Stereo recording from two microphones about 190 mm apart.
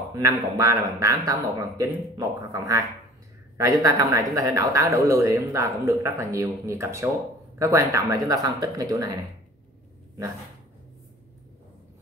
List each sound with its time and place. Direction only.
0.1 s speech: 15° right (ahead or behind)